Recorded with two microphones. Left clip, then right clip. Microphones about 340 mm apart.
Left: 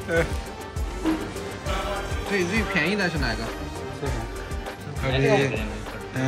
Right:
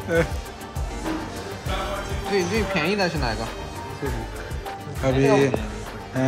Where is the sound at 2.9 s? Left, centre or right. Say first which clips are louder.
Right 2 dB; centre.